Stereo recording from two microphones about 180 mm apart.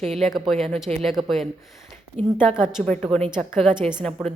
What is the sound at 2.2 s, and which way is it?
Speech, 35° right (ahead or behind).